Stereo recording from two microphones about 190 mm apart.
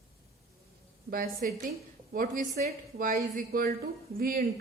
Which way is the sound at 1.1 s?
45° right (ahead or behind).